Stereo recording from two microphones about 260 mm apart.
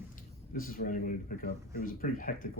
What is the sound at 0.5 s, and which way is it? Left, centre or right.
Speech, left.